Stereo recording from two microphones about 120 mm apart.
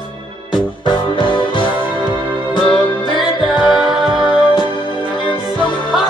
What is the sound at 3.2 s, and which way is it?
Music, centre (ahead or behind).